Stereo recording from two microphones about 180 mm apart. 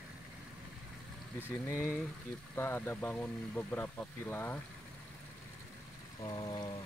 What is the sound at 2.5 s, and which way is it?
Speech, 15° left (ahead or behind).